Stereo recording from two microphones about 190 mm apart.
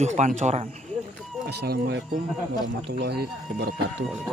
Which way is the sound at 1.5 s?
60° right (ahead or behind).